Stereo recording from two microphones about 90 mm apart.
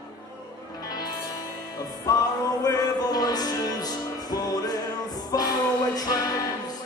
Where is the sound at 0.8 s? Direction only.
45° left (ahead or behind).